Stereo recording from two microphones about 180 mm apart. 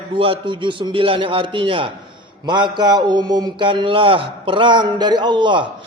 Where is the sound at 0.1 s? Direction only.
30° right (ahead or behind).